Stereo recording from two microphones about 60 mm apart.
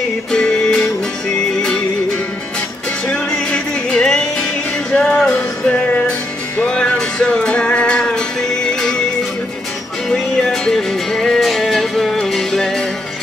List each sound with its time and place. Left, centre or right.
0.3 s music: centre
3.1 s music: centre
5.9 s music: left; by 8.9 s centre
10.0 s music: centre